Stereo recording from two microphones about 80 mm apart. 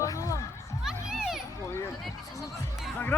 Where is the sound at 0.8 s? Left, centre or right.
Centre.